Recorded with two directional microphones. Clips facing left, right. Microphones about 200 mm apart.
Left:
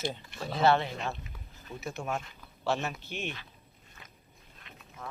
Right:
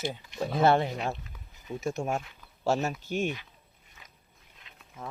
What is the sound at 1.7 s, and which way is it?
Speech, 45° right (ahead or behind).